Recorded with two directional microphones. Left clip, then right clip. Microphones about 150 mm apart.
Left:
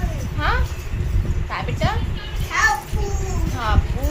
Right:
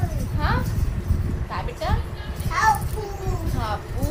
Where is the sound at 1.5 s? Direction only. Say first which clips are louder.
Left 4 dB; 65° left (ahead or behind).